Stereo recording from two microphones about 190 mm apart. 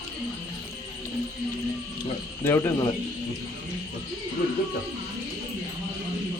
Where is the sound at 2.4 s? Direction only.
15° left (ahead or behind).